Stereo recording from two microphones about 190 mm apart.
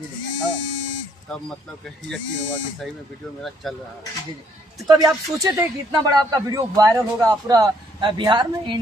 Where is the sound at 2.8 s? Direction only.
Centre (ahead or behind).